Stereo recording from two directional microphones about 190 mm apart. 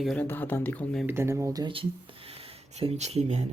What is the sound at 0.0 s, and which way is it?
Speech, 5° left (ahead or behind).